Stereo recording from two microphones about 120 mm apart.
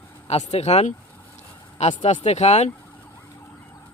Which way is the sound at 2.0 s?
65° left (ahead or behind).